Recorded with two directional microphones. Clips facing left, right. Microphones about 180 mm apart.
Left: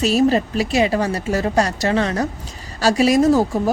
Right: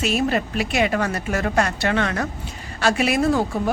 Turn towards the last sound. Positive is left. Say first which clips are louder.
# left 5 dB
turn(degrees=35)  # may be behind; listen again after turning